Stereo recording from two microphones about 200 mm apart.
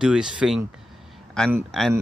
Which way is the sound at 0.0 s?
5° right (ahead or behind).